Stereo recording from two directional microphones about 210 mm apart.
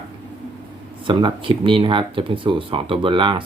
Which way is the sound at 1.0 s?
25° right (ahead or behind).